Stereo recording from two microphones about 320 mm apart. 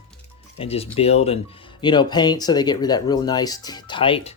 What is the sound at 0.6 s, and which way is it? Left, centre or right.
Speech, centre.